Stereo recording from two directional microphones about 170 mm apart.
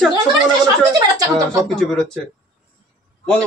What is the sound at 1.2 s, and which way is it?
Speech, 20° right (ahead or behind).